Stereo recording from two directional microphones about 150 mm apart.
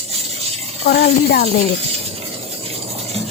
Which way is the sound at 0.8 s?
90° left.